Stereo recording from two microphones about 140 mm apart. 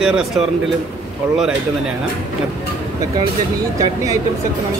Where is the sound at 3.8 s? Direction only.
25° right (ahead or behind).